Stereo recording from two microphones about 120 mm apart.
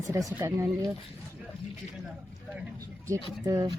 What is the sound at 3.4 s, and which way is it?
Speech, 30° right (ahead or behind).